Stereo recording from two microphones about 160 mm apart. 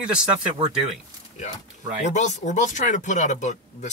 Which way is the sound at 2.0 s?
50° left (ahead or behind).